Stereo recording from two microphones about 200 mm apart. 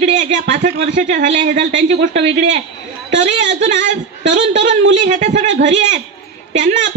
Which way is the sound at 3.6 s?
40° right (ahead or behind).